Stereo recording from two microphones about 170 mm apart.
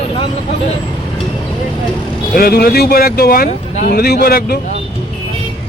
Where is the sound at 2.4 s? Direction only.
65° left (ahead or behind).